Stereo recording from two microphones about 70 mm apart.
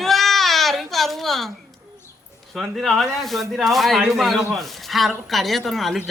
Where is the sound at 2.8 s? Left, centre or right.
Centre.